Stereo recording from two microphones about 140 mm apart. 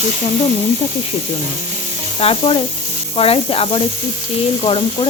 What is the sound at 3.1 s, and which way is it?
Sizzle, 45° left (ahead or behind).